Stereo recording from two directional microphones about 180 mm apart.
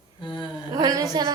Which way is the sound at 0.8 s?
20° right (ahead or behind).